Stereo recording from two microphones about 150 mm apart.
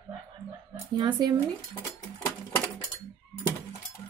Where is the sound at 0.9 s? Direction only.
30° right (ahead or behind).